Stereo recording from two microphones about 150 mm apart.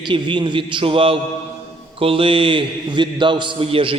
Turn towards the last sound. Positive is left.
turn(degrees=-35)  # may be behind; listen again after turning